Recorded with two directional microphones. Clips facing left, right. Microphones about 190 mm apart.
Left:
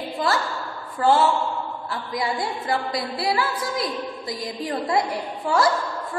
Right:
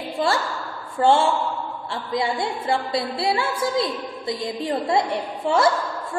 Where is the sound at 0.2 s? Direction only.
25° right (ahead or behind).